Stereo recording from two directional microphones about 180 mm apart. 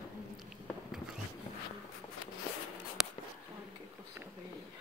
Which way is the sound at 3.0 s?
5° right (ahead or behind).